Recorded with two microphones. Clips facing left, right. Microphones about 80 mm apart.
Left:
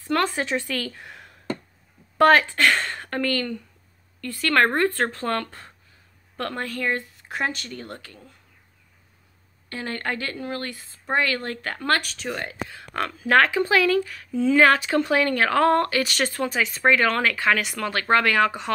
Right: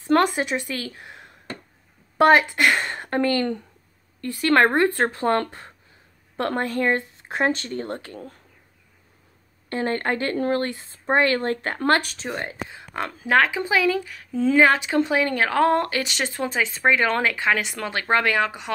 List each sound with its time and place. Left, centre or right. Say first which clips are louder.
0.0 s speech: right 4 dB; centre
0.9 s a sound: even; right
2.1 s speech: right 1 dB; centre; by 8.2 s right
9.7 s speech: right 5 dB; right
14.3 s speech: even; right
14.6 s speech: even; centre